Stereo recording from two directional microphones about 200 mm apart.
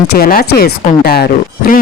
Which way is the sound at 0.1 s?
50° left (ahead or behind).